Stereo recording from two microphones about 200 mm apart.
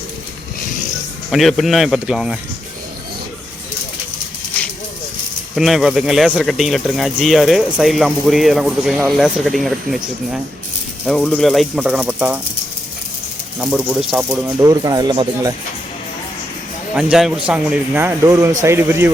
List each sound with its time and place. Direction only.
1.3 s speech: centre (ahead or behind)
5.5 s speech: centre (ahead or behind)
13.6 s speech: 5° right (ahead or behind)
14.6 s speech: 15° right (ahead or behind)
16.9 s speech: centre (ahead or behind)